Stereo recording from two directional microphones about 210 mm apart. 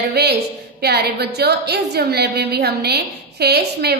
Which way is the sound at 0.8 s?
50° right (ahead or behind).